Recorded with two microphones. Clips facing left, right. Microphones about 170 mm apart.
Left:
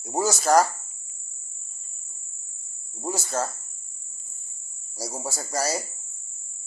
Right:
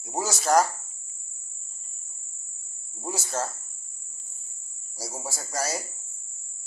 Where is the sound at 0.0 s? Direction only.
Centre (ahead or behind).